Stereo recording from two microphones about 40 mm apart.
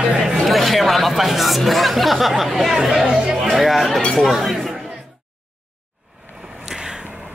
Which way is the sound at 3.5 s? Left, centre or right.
Centre.